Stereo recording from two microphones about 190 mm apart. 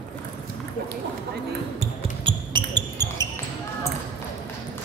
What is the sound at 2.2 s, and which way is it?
Basketball bounce, 25° right (ahead or behind).